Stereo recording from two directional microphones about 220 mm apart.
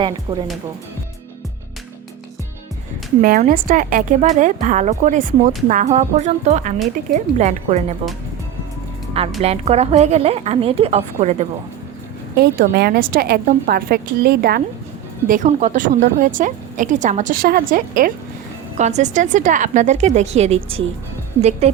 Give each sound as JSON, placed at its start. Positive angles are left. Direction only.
{"t": 0.0, "sound": "a woman's voice", "side_deg": -20}
{"t": 3.2, "sound": "a woman's voice", "side_deg": -40}
{"t": 9.4, "sound": "a woman's voice", "side_deg": -30}
{"t": 12.4, "sound": "a woman's voice", "side_deg": -45}
{"t": 15.3, "sound": "a woman's voice", "side_deg": -35}